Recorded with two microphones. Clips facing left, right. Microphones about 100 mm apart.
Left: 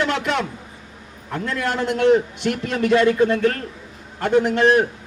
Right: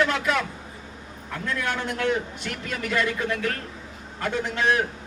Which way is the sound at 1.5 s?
55° left (ahead or behind).